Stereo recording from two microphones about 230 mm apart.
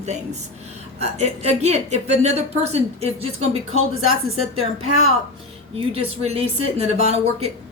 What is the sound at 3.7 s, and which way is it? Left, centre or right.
Speech, right.